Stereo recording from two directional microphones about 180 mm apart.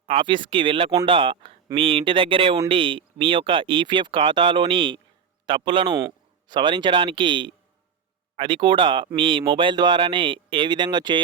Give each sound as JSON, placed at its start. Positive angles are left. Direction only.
{"t": 0.0, "sound": "speech", "side_deg": -30}